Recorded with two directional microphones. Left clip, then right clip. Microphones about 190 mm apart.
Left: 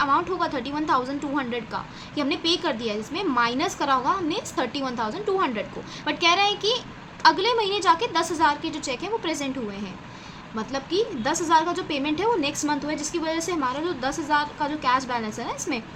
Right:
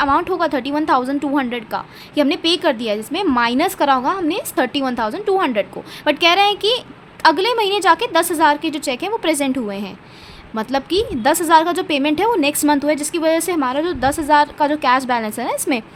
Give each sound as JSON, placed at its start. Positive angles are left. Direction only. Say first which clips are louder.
{"t": 0.0, "sound": "a woman's voice", "louder": "right 6 dB", "side_deg": -55}